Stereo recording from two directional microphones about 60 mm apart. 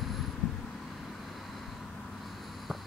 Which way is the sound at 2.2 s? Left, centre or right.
Centre.